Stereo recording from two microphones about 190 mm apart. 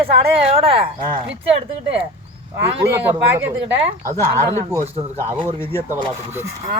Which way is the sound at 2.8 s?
10° right (ahead or behind).